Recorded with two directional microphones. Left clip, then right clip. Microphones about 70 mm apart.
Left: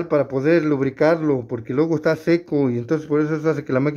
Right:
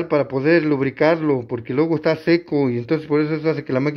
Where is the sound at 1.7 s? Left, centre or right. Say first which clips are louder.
Even; centre.